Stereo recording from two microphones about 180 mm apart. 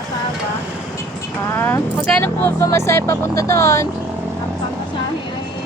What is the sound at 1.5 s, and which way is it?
Speech, 10° left (ahead or behind).